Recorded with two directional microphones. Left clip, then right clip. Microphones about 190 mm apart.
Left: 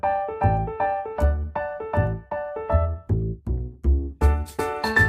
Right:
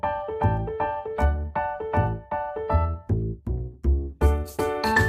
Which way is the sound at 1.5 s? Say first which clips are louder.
Right 2 dB; 20° left (ahead or behind).